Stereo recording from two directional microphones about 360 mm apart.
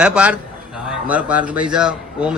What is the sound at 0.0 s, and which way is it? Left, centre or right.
A man's voice, centre.